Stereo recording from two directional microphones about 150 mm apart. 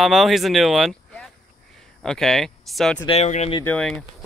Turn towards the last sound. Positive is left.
turn(degrees=5)  # may be behind; listen again after turning